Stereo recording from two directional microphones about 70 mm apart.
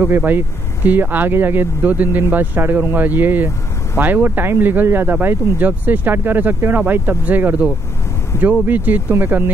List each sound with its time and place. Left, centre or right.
0.1 s speech: right